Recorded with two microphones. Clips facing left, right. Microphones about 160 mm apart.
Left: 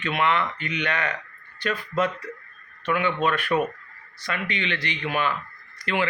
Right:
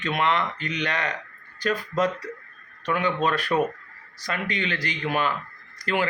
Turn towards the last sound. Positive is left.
turn(degrees=-40)  # may be behind; listen again after turning